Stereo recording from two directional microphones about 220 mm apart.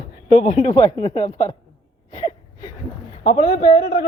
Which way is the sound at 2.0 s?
20° left (ahead or behind).